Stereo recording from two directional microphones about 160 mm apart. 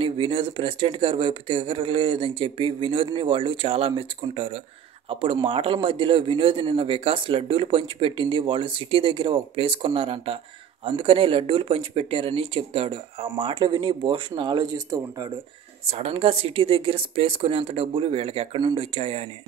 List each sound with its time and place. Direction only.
0.0 s speech: 35° right (ahead or behind)
15.9 s speech: 35° right (ahead or behind)